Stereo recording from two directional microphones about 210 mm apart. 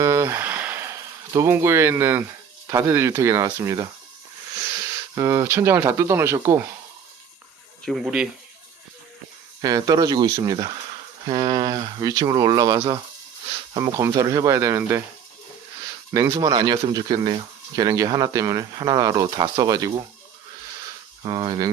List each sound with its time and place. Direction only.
0.0 s a sound: 10° right (ahead or behind)
2.6 s speech: 10° right (ahead or behind)
5.1 s speech: 15° right (ahead or behind)
7.9 s speech: centre (ahead or behind)
9.6 s speech: 15° right (ahead or behind)
16.1 s speech: 15° right (ahead or behind)
21.2 s speech: 20° right (ahead or behind)